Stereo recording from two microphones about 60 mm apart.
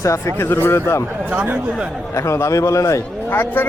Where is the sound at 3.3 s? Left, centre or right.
Left.